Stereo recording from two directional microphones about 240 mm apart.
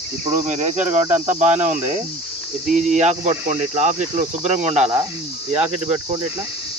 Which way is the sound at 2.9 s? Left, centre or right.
Right.